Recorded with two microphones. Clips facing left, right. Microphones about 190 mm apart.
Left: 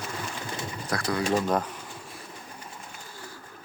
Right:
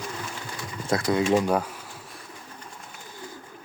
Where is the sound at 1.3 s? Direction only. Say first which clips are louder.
Right 1 dB; 10° right (ahead or behind).